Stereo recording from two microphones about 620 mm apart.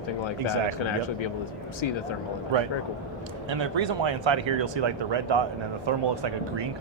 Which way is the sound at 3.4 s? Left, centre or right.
Right.